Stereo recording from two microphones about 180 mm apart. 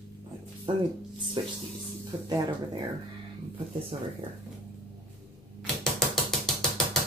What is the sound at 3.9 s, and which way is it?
Speech, 30° right (ahead or behind).